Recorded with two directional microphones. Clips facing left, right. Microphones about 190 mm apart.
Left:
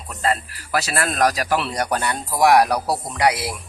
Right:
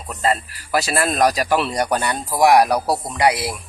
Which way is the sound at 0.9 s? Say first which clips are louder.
Right 2 dB; 15° right (ahead or behind).